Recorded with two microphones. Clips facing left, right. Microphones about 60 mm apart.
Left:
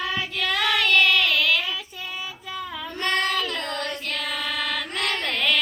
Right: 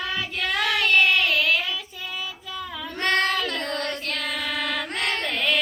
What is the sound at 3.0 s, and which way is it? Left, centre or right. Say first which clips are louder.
Child singing: right 2 dB; right.